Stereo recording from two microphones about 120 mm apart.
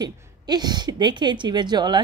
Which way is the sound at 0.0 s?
35° right (ahead or behind).